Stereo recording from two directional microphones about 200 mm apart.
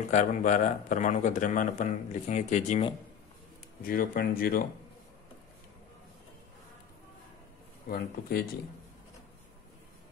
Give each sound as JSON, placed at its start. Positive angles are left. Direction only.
{"t": 0.1, "sound": "a man's voice", "side_deg": 40}
{"t": 7.9, "sound": "speech", "side_deg": 50}